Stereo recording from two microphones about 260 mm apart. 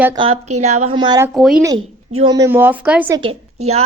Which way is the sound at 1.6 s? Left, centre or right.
Centre.